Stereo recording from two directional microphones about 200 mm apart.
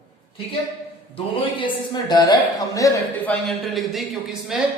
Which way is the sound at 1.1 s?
25° left (ahead or behind).